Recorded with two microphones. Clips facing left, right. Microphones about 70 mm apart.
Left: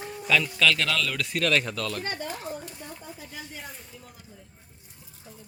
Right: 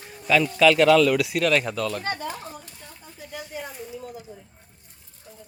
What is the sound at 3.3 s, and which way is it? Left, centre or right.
Snake, centre.